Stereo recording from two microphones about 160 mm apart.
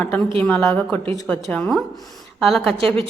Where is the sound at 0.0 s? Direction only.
10° left (ahead or behind).